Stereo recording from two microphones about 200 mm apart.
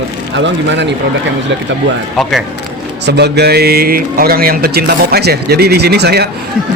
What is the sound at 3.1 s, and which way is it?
A man's voice, 55° right (ahead or behind).